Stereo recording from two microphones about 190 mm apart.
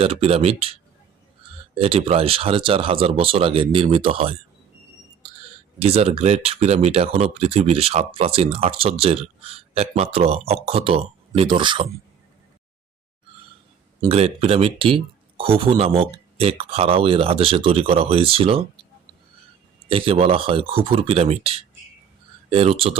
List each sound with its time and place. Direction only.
0.0 s speech: 30° right (ahead or behind)
5.8 s speech: 30° right (ahead or behind)
14.1 s speech: 30° right (ahead or behind)
19.9 s speech: 30° right (ahead or behind)